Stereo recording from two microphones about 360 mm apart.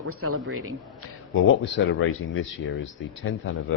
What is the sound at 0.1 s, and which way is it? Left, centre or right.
Speech, right.